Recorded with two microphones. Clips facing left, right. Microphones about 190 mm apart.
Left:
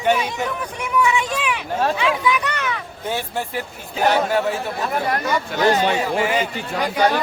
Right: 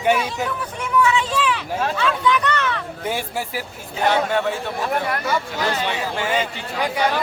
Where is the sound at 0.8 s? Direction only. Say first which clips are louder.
Right 1 dB; 15° left (ahead or behind).